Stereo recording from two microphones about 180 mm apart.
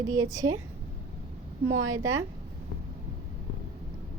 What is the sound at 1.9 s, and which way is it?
Speech, 20° right (ahead or behind).